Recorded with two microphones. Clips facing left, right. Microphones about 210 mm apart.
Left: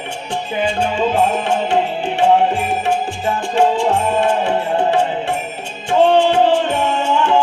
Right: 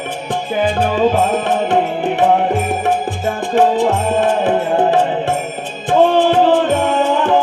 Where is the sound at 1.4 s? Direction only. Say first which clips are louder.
Right 2 dB; 55° right (ahead or behind).